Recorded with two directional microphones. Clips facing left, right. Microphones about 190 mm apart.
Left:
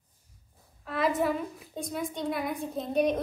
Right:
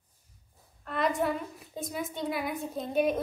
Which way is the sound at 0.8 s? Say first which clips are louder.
Left 1 dB; 5° left (ahead or behind).